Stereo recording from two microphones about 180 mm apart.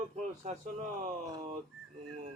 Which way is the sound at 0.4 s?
40° right (ahead or behind).